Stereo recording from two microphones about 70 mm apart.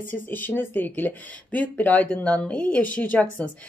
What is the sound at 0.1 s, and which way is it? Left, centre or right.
Speech, left.